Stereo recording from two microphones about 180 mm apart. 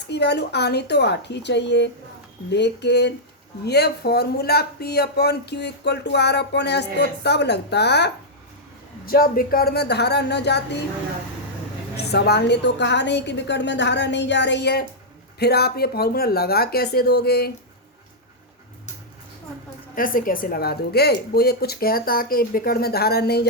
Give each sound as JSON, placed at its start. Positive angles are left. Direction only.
{"t": 0.1, "sound": "speech", "side_deg": 70}
{"t": 9.0, "sound": "a woman's voice", "side_deg": 55}
{"t": 12.1, "sound": "a woman's voice", "side_deg": 65}
{"t": 20.0, "sound": "a woman's voice", "side_deg": 50}